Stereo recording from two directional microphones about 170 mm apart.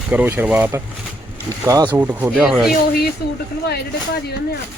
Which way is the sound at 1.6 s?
20° right (ahead or behind).